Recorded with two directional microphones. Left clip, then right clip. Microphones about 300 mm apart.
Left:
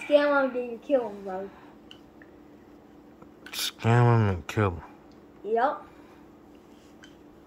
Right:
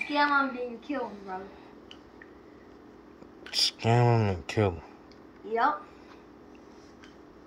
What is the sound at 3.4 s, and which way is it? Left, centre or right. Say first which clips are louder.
Speech: right 3 dB; centre.